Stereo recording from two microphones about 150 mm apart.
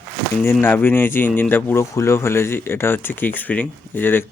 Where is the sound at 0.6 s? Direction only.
15° left (ahead or behind).